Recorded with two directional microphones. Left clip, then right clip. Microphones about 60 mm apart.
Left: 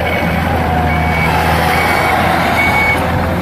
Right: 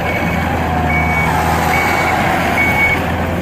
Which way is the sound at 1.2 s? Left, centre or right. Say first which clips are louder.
Left 2 dB; left.